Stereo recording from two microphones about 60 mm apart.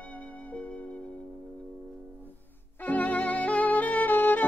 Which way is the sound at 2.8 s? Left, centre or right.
Left.